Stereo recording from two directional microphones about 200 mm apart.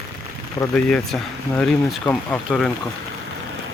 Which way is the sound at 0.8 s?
5° left (ahead or behind).